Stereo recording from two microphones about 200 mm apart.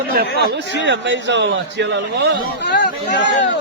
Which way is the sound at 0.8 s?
60° right (ahead or behind).